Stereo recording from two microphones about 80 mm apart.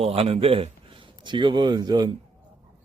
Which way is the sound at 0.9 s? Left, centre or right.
Right.